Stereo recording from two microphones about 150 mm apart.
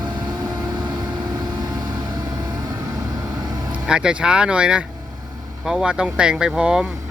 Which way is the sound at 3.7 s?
5° right (ahead or behind).